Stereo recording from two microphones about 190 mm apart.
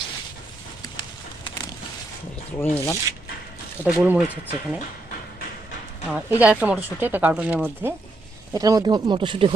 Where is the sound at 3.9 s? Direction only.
5° right (ahead or behind).